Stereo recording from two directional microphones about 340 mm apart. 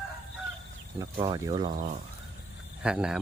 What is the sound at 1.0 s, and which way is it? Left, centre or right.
Speech, centre.